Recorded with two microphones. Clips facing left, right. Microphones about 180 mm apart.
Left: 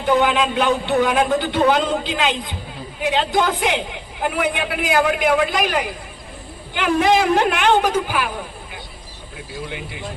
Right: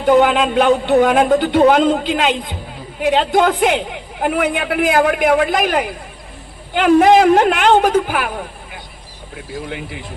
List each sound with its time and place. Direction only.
0.0 s speech: 50° right (ahead or behind)